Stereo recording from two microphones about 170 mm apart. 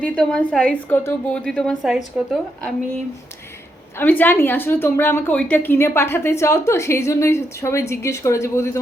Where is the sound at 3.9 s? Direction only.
10° left (ahead or behind).